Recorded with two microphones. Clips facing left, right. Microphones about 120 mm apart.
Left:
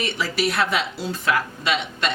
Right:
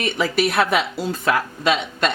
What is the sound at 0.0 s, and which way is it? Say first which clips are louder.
Speech: right 4 dB; 50° right (ahead or behind).